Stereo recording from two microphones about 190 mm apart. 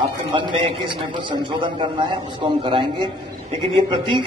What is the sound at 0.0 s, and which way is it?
A man's voice, 25° right (ahead or behind).